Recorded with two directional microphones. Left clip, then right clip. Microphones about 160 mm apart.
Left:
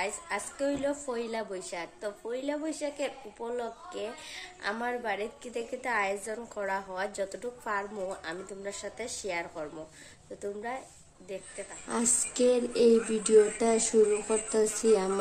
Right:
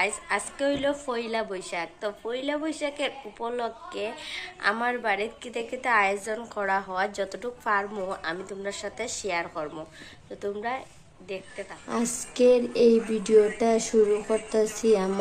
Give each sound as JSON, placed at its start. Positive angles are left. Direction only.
{"t": 0.6, "sound": "a woman's voice", "side_deg": 10}
{"t": 11.9, "sound": "a woman's voice", "side_deg": 15}